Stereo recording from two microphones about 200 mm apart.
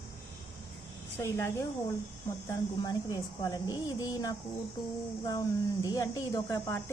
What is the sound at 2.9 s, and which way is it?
A woman's voice, 15° left (ahead or behind).